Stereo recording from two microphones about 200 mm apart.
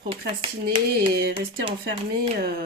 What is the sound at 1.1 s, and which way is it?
Speech, 50° right (ahead or behind).